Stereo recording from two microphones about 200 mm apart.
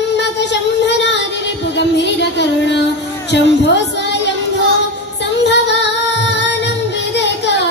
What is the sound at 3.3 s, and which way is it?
Speech, 60° left (ahead or behind).